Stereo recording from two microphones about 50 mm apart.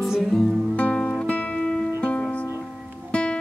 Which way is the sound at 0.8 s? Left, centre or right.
Left.